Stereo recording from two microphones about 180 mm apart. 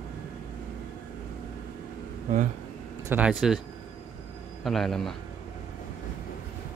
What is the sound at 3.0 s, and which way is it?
Speech, 10° right (ahead or behind).